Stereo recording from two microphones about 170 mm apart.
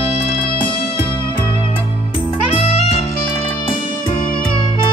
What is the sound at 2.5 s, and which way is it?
Music, 35° left (ahead or behind).